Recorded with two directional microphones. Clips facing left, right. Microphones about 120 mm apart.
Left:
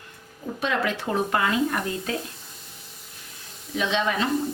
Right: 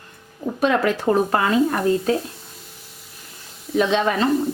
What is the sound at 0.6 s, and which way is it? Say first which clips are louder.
Speech: right 7 dB; 45° right (ahead or behind).